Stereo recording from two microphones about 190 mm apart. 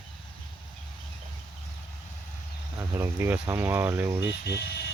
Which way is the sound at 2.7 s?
15° right (ahead or behind).